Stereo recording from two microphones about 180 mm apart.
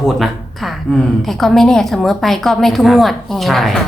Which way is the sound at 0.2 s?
Centre (ahead or behind).